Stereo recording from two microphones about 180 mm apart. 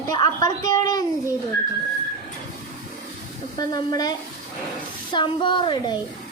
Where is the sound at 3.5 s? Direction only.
20° left (ahead or behind).